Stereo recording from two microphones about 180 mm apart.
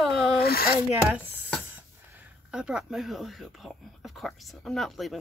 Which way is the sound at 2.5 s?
5° right (ahead or behind).